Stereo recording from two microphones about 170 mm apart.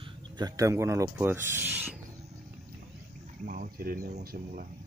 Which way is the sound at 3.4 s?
55° right (ahead or behind).